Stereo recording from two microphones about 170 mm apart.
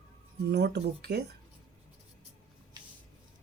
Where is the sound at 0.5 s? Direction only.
75° right (ahead or behind).